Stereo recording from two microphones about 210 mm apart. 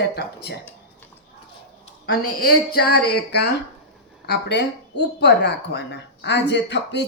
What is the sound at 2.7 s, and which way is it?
A woman's voice, 50° left (ahead or behind).